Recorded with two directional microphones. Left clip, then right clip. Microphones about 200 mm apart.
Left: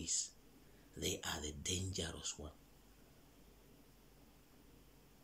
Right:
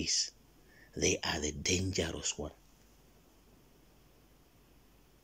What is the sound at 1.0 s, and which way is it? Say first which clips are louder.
Speech: right 10 dB; 10° right (ahead or behind).